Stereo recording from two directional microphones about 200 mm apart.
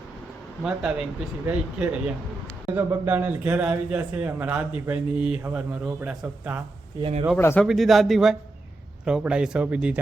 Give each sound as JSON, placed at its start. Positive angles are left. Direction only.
{"t": 0.6, "sound": "a man's voice", "side_deg": -5}
{"t": 7.0, "sound": "speech", "side_deg": -25}
{"t": 7.3, "sound": "a man's voice", "side_deg": 10}
{"t": 7.7, "sound": "speech", "side_deg": 0}